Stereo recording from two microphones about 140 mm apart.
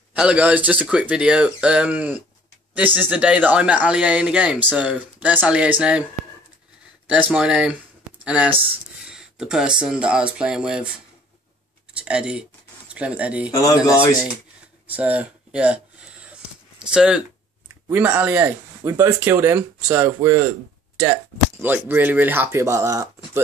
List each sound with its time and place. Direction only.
0.1 s speech: 10° right (ahead or behind)
7.1 s speech: 5° right (ahead or behind)
11.9 s a sound: 10° right (ahead or behind)
13.5 s speech: 25° left (ahead or behind)
14.9 s speech: 10° right (ahead or behind)
16.9 s speech: 5° right (ahead or behind); by 23.4 s 20° right (ahead or behind)